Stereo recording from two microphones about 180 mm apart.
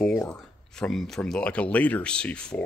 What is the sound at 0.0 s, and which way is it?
Speech, 10° left (ahead or behind).